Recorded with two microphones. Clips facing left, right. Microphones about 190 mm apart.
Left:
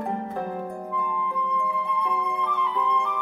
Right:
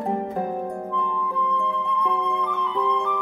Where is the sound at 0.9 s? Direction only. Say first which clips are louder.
Right 2 dB; 10° left (ahead or behind).